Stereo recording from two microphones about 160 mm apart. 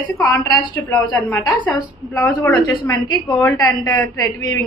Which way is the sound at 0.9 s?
10° left (ahead or behind).